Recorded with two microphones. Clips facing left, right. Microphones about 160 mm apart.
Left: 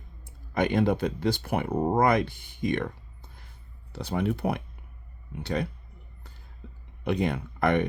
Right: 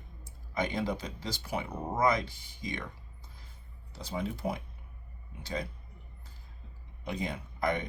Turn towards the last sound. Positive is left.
turn(degrees=65)  # may be behind; listen again after turning